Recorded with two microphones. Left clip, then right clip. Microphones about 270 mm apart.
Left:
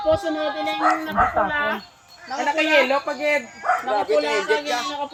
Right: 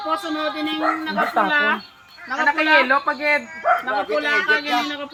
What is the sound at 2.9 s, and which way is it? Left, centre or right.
Speech, right.